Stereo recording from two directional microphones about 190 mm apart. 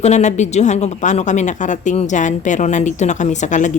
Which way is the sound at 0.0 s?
35° left (ahead or behind).